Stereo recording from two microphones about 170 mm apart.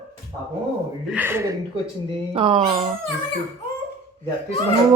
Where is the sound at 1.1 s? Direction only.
10° right (ahead or behind).